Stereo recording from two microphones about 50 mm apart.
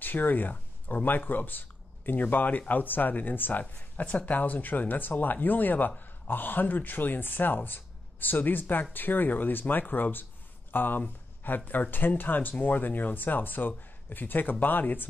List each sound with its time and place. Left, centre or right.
0.0 s speech: left
3.9 s a sound: left
4.3 s speech: left